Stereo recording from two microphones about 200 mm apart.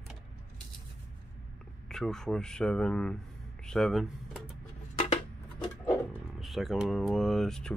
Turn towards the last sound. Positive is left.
turn(degrees=0)  # may be behind; listen again after turning